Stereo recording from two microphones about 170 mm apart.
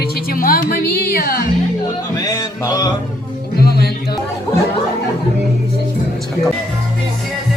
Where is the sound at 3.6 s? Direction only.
70° left (ahead or behind).